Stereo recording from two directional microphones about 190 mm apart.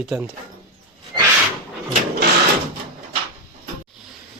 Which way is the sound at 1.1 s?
20° right (ahead or behind).